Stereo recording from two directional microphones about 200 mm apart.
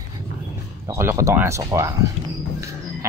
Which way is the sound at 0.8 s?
15° right (ahead or behind).